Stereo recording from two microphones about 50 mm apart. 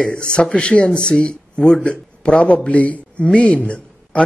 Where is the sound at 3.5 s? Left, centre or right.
Left.